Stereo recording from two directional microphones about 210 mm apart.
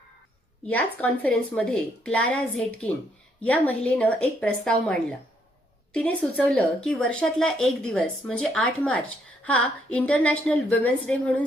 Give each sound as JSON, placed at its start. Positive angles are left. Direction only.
{"t": 0.7, "sound": "speech", "side_deg": 5}